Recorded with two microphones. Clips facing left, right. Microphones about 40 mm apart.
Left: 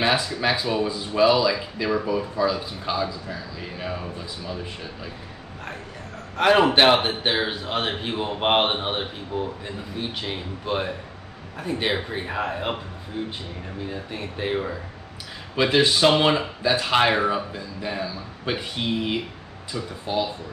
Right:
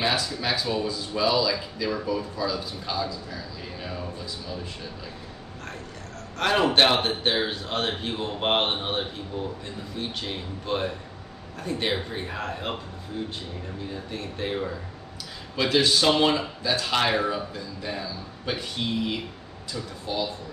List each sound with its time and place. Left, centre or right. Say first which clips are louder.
0.0 s speech: left 4 dB; left
6.3 s a man's voice: left 4 dB; centre